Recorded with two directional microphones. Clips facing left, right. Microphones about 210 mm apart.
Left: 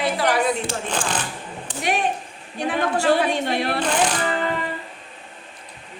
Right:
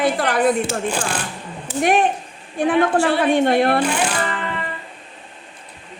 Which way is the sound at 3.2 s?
55° right (ahead or behind).